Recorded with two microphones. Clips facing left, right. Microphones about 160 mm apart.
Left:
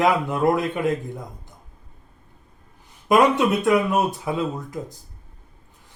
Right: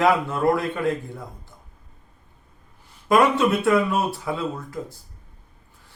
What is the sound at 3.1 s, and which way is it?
Speech, 20° left (ahead or behind).